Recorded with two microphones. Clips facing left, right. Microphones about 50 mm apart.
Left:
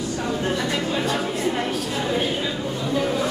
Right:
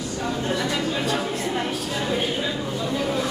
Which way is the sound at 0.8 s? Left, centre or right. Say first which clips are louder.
Left 1 dB; centre.